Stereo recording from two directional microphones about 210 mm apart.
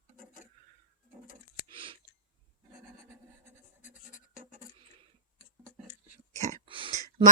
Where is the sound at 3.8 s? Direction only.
35° left (ahead or behind).